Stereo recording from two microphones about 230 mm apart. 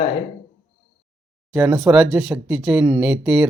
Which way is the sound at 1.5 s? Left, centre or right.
Centre.